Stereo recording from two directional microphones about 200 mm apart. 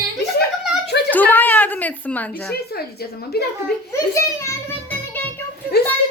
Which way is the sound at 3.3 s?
55° left (ahead or behind).